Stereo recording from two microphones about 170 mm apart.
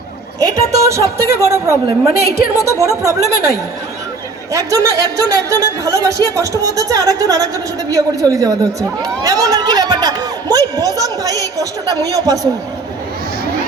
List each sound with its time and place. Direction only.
0.3 s a woman's voice: 20° right (ahead or behind)
4.5 s speech: 20° right (ahead or behind)